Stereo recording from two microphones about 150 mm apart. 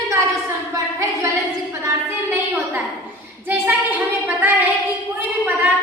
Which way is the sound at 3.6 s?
10° right (ahead or behind).